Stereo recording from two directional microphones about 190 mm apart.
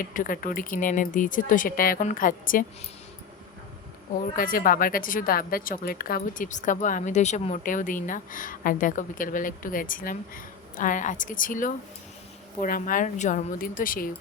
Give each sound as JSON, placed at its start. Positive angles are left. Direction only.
{"t": 0.0, "sound": "a woman's voice", "side_deg": 45}
{"t": 4.4, "sound": "a woman's voice", "side_deg": 45}